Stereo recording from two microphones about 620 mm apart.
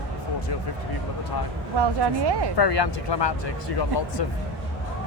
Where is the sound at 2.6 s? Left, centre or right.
Left.